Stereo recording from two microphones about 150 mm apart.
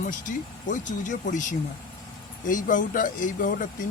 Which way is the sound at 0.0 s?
60° left (ahead or behind).